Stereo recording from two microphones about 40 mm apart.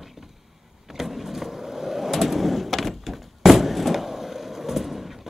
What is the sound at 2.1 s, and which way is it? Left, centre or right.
Door, centre.